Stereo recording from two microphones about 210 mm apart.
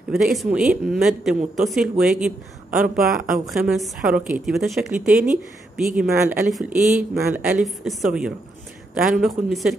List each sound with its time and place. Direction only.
0.1 s speech: centre (ahead or behind)
3.1 s speech: 40° right (ahead or behind)
3.4 s speech: centre (ahead or behind)